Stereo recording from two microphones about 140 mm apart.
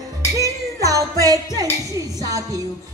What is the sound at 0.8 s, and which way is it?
A woman's voice, 25° right (ahead or behind).